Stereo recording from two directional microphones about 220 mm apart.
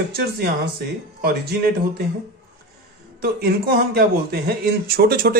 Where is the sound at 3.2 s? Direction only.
45° right (ahead or behind).